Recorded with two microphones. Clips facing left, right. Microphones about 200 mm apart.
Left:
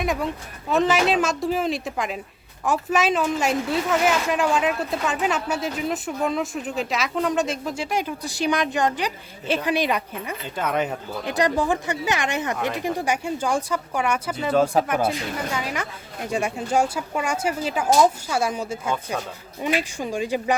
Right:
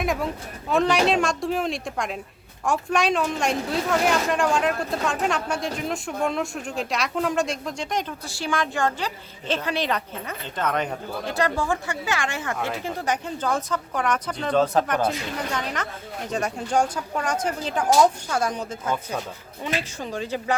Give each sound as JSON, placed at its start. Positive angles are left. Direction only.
{"t": 0.0, "sound": "speech", "side_deg": 0}